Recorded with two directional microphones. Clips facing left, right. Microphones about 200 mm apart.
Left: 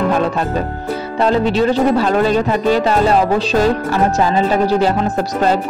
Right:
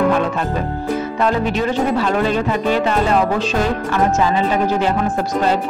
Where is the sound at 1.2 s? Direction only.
30° left (ahead or behind).